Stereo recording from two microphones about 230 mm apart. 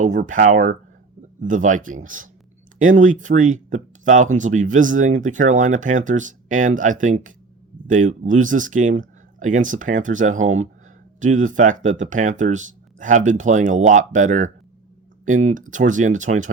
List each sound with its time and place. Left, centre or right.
0.0 s speech: right